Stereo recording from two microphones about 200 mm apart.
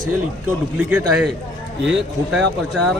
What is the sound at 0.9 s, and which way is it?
A man's voice, 10° right (ahead or behind).